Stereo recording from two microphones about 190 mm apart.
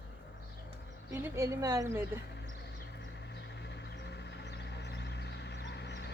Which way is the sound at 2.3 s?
65° left (ahead or behind).